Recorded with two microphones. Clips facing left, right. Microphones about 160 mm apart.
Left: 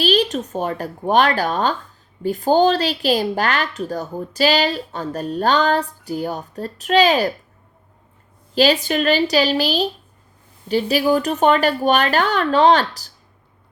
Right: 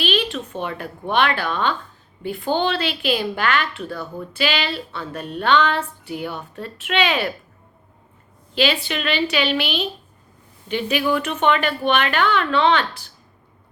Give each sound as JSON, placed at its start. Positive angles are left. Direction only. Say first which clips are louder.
{"t": 0.0, "sound": "a woman's voice", "louder": "left 5 dB", "side_deg": 40}
{"t": 8.5, "sound": "a woman's voice", "louder": "left 5 dB", "side_deg": 40}